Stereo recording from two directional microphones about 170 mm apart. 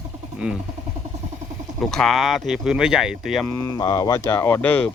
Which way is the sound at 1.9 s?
Centre (ahead or behind).